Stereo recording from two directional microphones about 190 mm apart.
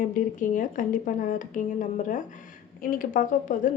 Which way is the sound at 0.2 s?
45° left (ahead or behind).